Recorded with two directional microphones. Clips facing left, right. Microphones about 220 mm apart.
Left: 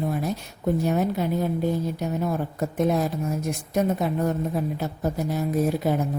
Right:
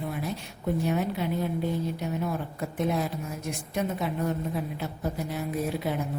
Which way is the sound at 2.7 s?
40° left (ahead or behind).